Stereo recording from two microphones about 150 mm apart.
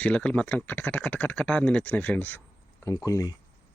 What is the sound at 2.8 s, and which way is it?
Speech, 25° left (ahead or behind).